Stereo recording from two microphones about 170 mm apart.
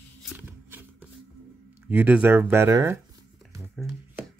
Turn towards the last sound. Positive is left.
turn(degrees=-15)  # may be behind; listen again after turning